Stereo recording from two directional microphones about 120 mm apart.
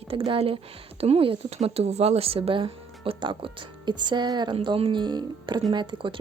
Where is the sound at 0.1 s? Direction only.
50° right (ahead or behind).